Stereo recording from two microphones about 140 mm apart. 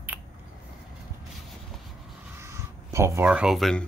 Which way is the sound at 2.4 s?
20° right (ahead or behind).